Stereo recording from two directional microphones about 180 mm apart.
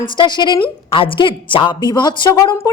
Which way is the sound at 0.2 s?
25° left (ahead or behind).